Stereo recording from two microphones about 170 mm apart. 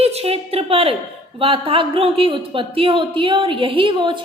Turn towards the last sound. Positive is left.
turn(degrees=-30)  # may be behind; listen again after turning